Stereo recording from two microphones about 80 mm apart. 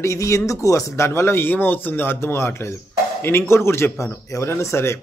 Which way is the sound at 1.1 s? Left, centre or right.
Left.